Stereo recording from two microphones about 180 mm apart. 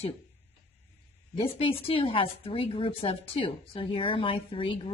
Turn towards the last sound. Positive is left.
turn(degrees=30)  # may be behind; listen again after turning